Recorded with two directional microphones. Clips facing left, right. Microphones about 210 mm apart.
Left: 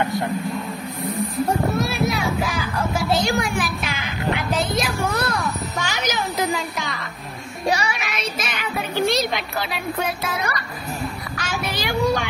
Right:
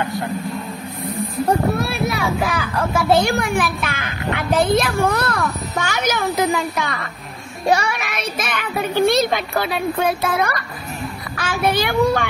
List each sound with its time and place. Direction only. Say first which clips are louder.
1.8 s speech: right 1 dB; 55° right (ahead or behind)
7.7 s music: right 7 dB; 55° right (ahead or behind)
9.1 s a child's voice: right 5 dB; 55° right (ahead or behind)